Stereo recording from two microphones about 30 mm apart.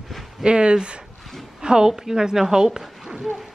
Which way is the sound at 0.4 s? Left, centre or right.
Right.